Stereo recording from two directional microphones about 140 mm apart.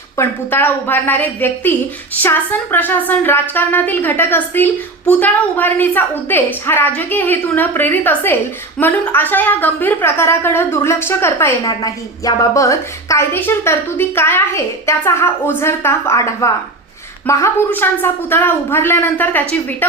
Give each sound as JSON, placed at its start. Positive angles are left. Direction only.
{"t": 0.2, "sound": "a woman's voice", "side_deg": 15}